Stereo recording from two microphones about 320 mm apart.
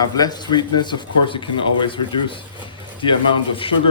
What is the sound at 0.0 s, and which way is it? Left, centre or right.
Speech, centre.